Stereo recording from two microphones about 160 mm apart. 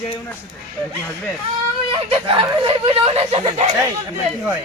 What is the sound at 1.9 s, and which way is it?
Speech, 35° right (ahead or behind).